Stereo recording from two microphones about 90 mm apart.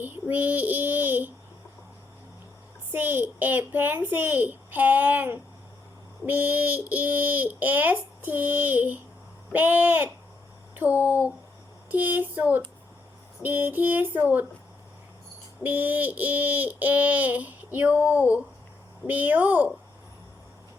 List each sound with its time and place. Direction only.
0.0 s child singing: 20° right (ahead or behind)
2.9 s child singing: 20° right (ahead or behind)
10.8 s speech: 20° right (ahead or behind)
11.9 s child singing: 20° right (ahead or behind)
15.6 s child singing: 20° right (ahead or behind)